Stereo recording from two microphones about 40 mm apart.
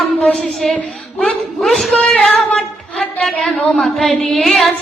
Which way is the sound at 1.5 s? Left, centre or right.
Centre.